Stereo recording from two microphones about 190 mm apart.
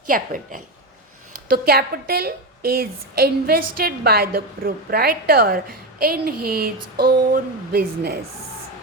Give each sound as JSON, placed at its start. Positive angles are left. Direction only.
{"t": 0.1, "sound": "a woman's voice", "side_deg": -50}
{"t": 1.5, "sound": "a woman's voice", "side_deg": -50}